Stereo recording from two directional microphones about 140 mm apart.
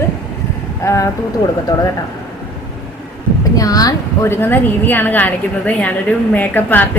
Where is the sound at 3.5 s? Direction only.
25° left (ahead or behind).